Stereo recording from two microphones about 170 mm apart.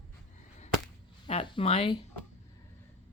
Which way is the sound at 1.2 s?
30° left (ahead or behind).